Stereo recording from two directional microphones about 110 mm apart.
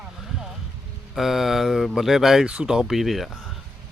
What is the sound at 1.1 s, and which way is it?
Speech, 5° right (ahead or behind).